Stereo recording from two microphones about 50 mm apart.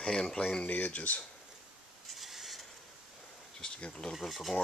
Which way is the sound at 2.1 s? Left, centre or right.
Centre.